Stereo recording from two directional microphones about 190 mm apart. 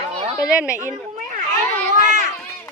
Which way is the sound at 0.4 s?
5° right (ahead or behind).